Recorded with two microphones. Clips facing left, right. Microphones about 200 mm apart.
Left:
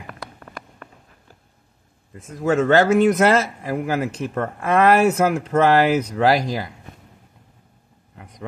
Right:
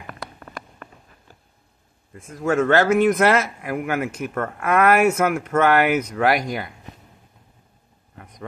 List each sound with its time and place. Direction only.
2.3 s a man's voice: 35° left (ahead or behind)